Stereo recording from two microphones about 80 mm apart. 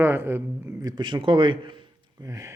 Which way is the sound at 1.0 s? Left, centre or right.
Right.